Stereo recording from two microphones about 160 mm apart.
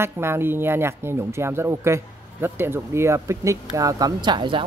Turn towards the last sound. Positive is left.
turn(degrees=-30)  # may be behind; listen again after turning